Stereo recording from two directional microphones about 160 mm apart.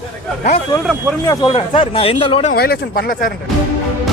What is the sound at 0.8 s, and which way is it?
Speech, 5° right (ahead or behind).